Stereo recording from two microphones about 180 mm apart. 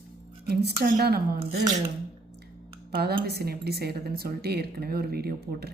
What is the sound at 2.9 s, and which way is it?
A woman's voice, 60° right (ahead or behind).